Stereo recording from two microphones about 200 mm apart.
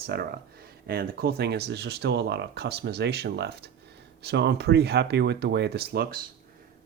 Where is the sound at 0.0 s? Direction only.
50° right (ahead or behind).